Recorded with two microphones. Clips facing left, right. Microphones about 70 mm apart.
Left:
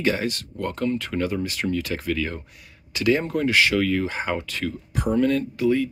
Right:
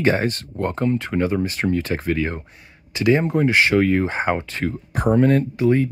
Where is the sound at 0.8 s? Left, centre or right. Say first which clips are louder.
Right 3 dB; right.